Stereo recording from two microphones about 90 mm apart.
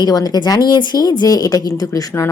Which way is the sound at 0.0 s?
45° left (ahead or behind).